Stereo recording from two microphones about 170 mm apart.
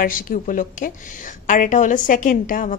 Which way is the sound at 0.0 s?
55° left (ahead or behind).